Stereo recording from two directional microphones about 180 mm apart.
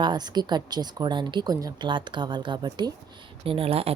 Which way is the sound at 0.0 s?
25° right (ahead or behind).